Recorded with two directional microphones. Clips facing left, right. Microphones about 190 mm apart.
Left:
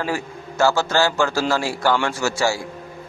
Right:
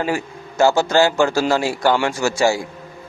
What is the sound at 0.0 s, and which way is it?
A man's voice, 20° right (ahead or behind).